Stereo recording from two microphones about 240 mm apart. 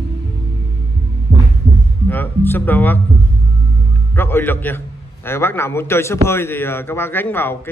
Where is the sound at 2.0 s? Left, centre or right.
Centre.